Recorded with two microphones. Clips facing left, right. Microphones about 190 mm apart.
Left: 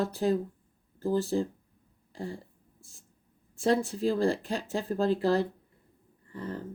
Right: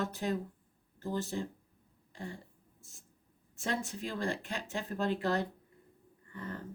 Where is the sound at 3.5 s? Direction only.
35° left (ahead or behind).